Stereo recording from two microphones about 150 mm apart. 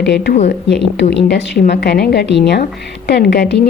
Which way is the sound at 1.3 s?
90° left.